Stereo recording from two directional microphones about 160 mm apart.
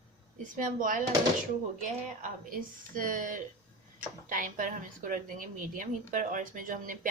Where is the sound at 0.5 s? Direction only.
55° right (ahead or behind).